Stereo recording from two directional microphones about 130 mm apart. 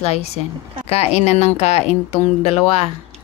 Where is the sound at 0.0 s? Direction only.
55° left (ahead or behind).